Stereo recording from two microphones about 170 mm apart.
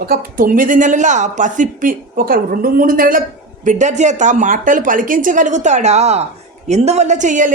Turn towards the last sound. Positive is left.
turn(degrees=-50)  # may be behind; listen again after turning